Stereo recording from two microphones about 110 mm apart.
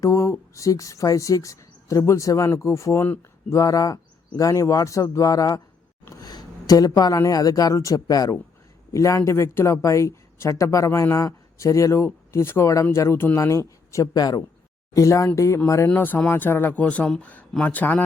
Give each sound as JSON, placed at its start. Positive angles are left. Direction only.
{"t": 0.0, "sound": "a woman's voice", "side_deg": 25}
{"t": 3.6, "sound": "a woman's voice", "side_deg": 30}